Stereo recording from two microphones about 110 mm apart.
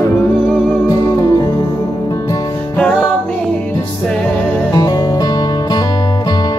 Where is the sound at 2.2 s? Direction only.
35° left (ahead or behind).